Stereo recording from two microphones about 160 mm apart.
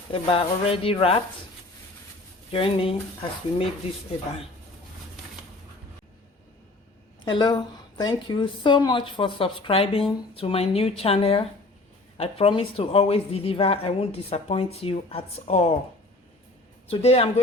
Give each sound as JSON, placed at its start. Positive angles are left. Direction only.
{"t": 0.1, "sound": "a woman's voice", "side_deg": 35}
{"t": 2.5, "sound": "a woman's voice", "side_deg": 35}
{"t": 7.3, "sound": "a woman's voice", "side_deg": 30}
{"t": 16.9, "sound": "a woman's voice", "side_deg": 40}